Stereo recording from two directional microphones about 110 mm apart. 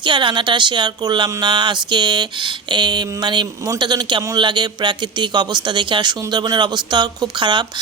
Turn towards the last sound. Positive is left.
turn(degrees=-45)  # may be behind; listen again after turning